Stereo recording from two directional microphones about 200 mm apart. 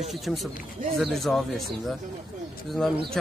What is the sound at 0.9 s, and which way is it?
Speech, centre (ahead or behind).